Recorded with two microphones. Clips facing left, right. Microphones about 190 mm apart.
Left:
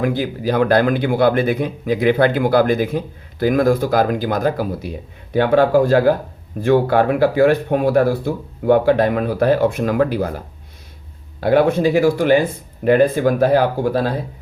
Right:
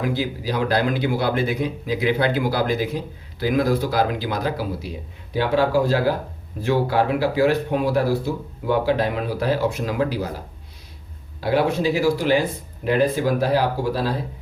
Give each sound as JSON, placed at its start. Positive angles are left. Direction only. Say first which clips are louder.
{"t": 0.0, "sound": "speech", "louder": "left 5 dB", "side_deg": 55}